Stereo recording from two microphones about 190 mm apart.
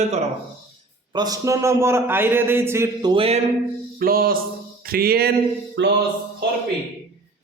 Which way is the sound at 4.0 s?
50° right (ahead or behind).